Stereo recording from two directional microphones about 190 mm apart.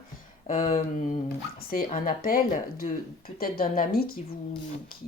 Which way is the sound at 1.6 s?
50° left (ahead or behind).